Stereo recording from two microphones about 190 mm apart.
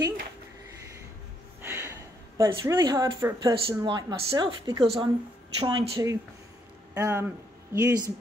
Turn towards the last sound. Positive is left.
turn(degrees=-15)  # may be behind; listen again after turning